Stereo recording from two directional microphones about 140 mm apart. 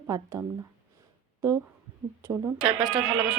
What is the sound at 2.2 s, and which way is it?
Speech, 20° right (ahead or behind).